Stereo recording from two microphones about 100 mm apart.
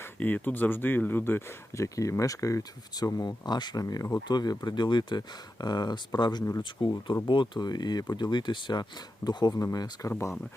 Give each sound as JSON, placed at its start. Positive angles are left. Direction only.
{"t": 0.0, "sound": "speech", "side_deg": 15}
{"t": 10.1, "sound": "speech", "side_deg": 25}